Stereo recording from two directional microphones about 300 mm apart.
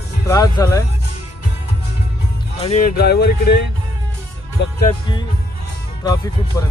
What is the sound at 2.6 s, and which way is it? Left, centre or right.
Music, left.